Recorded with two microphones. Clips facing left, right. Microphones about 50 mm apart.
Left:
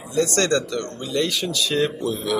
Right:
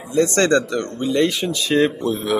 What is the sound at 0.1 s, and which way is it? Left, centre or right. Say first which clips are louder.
Speech: right 4 dB; right.